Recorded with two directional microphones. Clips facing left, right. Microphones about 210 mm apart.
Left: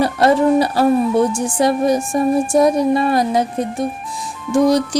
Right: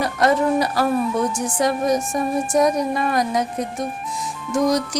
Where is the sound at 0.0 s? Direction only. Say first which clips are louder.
Left 5 dB; 30° left (ahead or behind).